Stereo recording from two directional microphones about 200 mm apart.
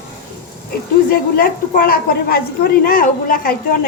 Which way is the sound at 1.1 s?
45° left (ahead or behind).